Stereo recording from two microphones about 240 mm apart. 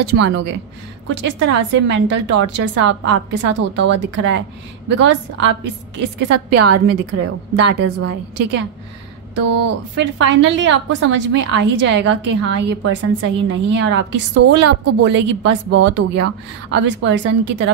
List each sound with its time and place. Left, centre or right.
0.0 s a woman's voice: right
6.5 s a woman's voice: right
7.7 s a woman's voice: right
9.9 s a woman's voice: right